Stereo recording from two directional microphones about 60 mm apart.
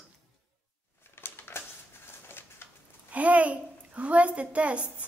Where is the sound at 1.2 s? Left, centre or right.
Left.